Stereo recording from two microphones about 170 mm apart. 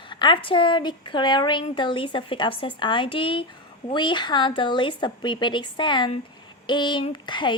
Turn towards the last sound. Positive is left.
turn(degrees=25)  # may be behind; listen again after turning